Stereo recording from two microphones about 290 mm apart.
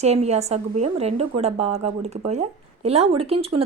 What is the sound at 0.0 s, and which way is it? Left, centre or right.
A woman's voice, right.